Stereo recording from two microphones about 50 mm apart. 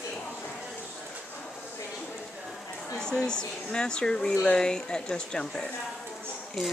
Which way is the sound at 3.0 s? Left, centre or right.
Centre.